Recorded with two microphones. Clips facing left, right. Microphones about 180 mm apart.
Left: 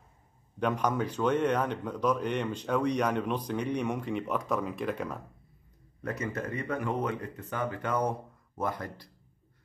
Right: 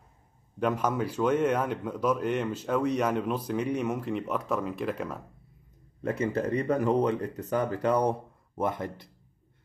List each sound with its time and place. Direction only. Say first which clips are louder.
0.6 s a man's voice: right 1 dB; 5° right (ahead or behind)
6.0 s speech: right 6 dB; 25° right (ahead or behind)